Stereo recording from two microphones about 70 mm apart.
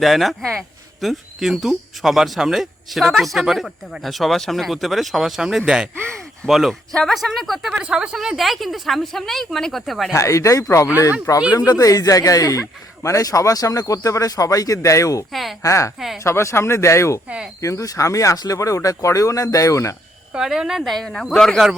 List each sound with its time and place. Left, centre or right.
0.0 s speech: centre
10.1 s speech: left
11.5 s speech: left
15.3 s speech: centre
15.6 s speech: left
17.2 s speech: centre
17.6 s speech: left
20.3 s speech: centre